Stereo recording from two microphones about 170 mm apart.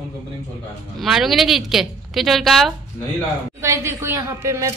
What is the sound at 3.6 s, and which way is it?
Speech, 15° right (ahead or behind).